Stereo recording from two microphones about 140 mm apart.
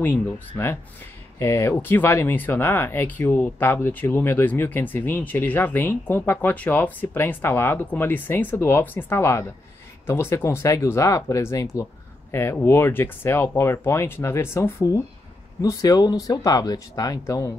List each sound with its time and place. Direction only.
0.0 s speech: 15° left (ahead or behind)